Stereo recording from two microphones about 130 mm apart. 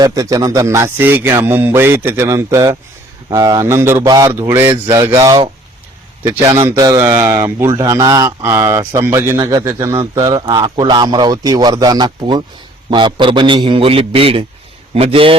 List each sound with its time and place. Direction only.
0.0 s a man's voice: 25° right (ahead or behind)
6.7 s a man's voice: 25° right (ahead or behind)
7.1 s a man's voice: 15° right (ahead or behind); by 15.4 s 45° right (ahead or behind)